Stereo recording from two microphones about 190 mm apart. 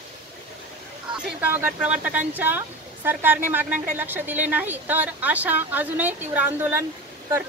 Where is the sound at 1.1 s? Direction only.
10° right (ahead or behind).